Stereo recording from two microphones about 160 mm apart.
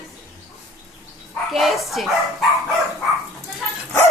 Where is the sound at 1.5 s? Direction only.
Centre (ahead or behind).